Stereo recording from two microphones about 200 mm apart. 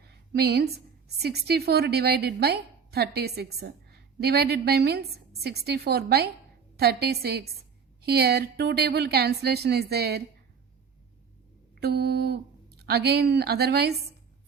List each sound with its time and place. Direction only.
0.0 s a woman's voice: 55° right (ahead or behind)
11.8 s speech: 55° right (ahead or behind)